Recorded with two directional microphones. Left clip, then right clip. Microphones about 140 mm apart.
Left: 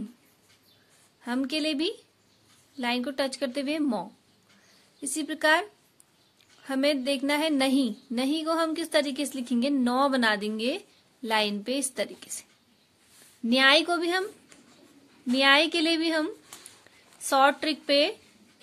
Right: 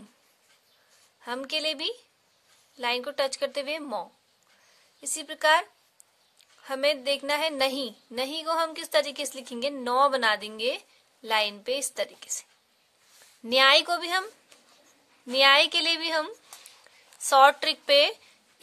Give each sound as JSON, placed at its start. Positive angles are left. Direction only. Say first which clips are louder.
{"t": 1.2, "sound": "a woman's voice", "louder": "even", "side_deg": -20}
{"t": 13.5, "sound": "a woman's voice", "louder": "right 1 dB", "side_deg": -30}
{"t": 15.3, "sound": "a woman's voice", "louder": "right 2 dB", "side_deg": -35}